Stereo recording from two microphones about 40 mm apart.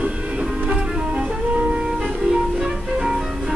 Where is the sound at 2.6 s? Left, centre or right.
Centre.